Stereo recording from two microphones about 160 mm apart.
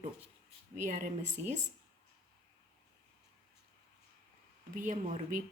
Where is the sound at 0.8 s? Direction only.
55° right (ahead or behind).